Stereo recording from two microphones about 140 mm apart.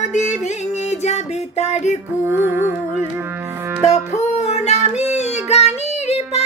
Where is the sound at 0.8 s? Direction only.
55° left (ahead or behind).